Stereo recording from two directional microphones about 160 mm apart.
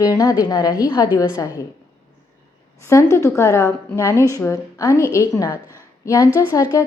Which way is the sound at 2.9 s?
15° left (ahead or behind).